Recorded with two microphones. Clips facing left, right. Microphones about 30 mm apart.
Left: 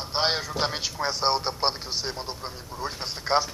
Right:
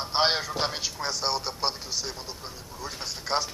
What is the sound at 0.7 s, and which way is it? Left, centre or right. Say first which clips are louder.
A man's voice: left 3 dB; centre.